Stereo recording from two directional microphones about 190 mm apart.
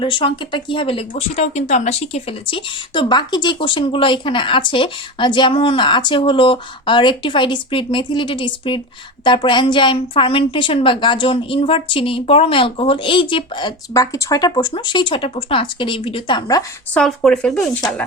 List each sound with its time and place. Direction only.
0.0 s speech: 25° left (ahead or behind)
16.9 s speech: 5° left (ahead or behind)